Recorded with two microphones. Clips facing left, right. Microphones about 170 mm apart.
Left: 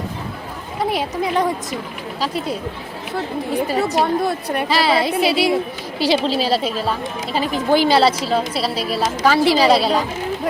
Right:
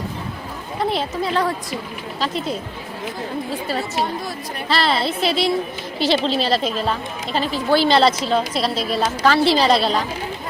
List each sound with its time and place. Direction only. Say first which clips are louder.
0.8 s a woman's voice: left 1 dB; 10° left (ahead or behind)